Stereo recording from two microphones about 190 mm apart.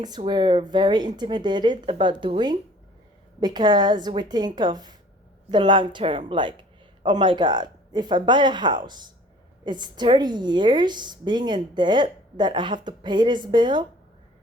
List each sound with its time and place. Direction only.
0.0 s a woman's voice: 20° right (ahead or behind)